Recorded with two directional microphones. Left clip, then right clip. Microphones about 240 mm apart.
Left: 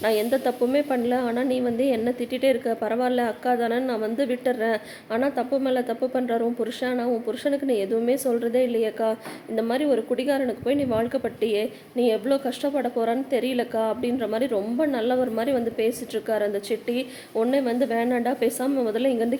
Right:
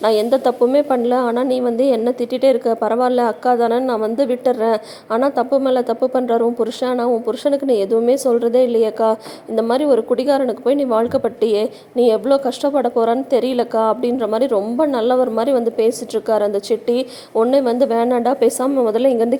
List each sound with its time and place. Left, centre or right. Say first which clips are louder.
0.0 s a woman's voice: right 8 dB; right